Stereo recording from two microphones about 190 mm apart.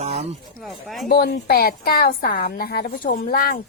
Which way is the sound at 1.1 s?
55° left (ahead or behind).